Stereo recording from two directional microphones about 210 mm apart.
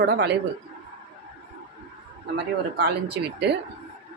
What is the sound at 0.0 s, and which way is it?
Speech, 45° right (ahead or behind).